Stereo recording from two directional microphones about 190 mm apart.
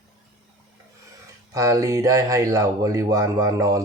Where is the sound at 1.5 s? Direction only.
15° right (ahead or behind).